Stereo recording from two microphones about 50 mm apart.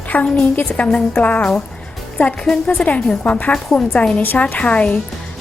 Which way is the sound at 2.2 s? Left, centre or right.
Left.